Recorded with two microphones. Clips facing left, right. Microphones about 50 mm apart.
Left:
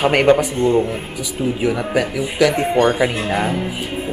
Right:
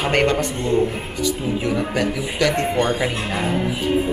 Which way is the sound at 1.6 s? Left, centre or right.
Centre.